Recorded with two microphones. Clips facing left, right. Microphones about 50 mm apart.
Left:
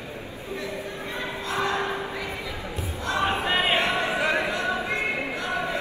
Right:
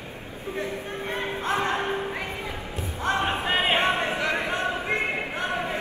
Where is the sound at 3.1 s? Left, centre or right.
Right.